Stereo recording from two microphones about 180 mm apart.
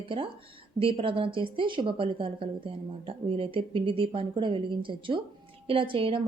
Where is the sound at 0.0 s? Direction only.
30° right (ahead or behind).